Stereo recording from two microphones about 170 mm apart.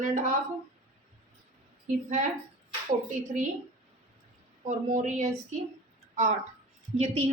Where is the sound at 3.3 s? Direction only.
50° right (ahead or behind).